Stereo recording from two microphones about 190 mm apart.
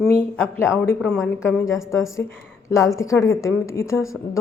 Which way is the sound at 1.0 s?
5° left (ahead or behind).